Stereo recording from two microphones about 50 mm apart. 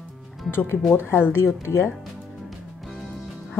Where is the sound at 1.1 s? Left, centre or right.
Left.